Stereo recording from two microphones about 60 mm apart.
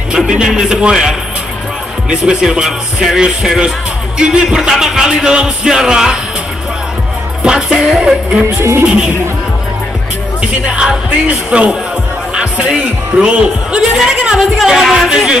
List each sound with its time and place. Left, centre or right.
0.1 s speech: centre
2.0 s music: centre
7.4 s music: centre
10.4 s music: centre
12.4 s speech: centre